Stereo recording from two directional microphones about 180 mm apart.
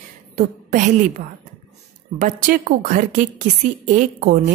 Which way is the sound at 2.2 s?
50° right (ahead or behind).